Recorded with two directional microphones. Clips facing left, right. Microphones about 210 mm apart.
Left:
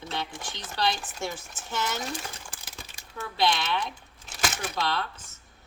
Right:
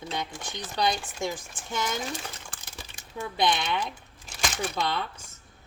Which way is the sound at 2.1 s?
Centre (ahead or behind).